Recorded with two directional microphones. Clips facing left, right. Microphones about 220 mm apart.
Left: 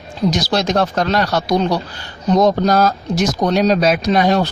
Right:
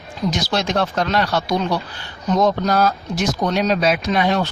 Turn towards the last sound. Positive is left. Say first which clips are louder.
# left 4 dB
turn(degrees=40)  # may be behind; listen again after turning